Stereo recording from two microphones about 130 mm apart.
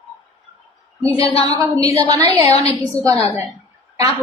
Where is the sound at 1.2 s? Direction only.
50° left (ahead or behind).